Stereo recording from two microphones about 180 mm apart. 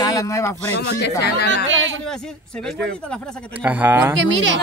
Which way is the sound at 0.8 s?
70° left (ahead or behind).